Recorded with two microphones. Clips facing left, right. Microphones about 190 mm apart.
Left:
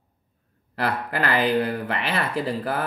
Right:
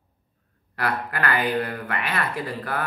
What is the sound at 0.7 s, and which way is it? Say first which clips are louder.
Speech: left 2 dB; 30° left (ahead or behind).